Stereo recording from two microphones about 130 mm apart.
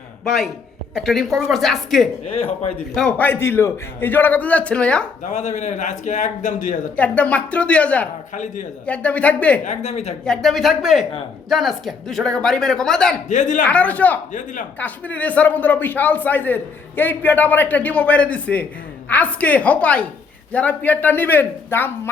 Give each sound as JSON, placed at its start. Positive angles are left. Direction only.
{"t": 0.3, "sound": "speech", "side_deg": 0}
{"t": 2.2, "sound": "a man's voice", "side_deg": 55}
{"t": 2.9, "sound": "speech", "side_deg": 10}
{"t": 5.2, "sound": "a man's voice", "side_deg": 65}
{"t": 6.9, "sound": "speech", "side_deg": 10}
{"t": 9.6, "sound": "a woman's voice", "side_deg": 60}
{"t": 10.2, "sound": "speech", "side_deg": 5}
{"t": 13.2, "sound": "a man's voice", "side_deg": 70}
{"t": 13.7, "sound": "speech", "side_deg": 10}